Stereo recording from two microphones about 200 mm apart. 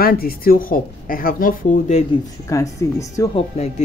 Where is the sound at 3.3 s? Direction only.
35° left (ahead or behind).